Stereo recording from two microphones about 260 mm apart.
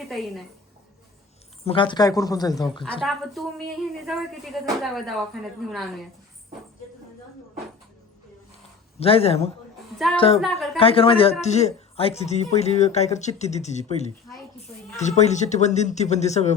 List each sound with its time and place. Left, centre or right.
0.1 s speech: centre
1.6 s speech: centre
3.0 s speech: centre
9.0 s speech: left
10.4 s speech: centre
10.8 s speech: left